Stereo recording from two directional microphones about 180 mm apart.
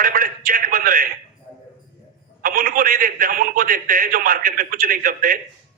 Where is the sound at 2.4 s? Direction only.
50° right (ahead or behind).